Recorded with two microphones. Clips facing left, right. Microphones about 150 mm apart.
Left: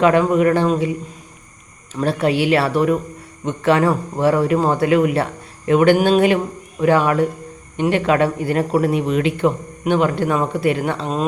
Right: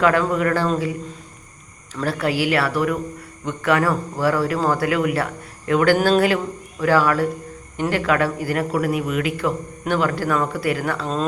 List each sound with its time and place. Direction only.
0.0 s a man's voice: 20° left (ahead or behind)
2.0 s a man's voice: 25° left (ahead or behind)